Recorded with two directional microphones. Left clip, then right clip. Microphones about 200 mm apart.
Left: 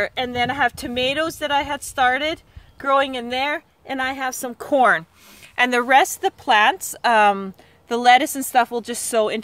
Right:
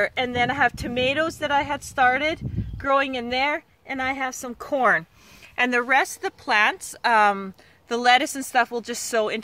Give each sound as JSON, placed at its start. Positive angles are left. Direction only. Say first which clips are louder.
{"t": 0.0, "sound": "a woman's voice", "louder": "left 1 dB", "side_deg": 40}
{"t": 7.3, "sound": "a woman's voice", "louder": "left 3 dB", "side_deg": 10}